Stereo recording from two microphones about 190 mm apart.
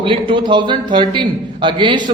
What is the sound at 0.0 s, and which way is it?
A man's voice, 25° right (ahead or behind).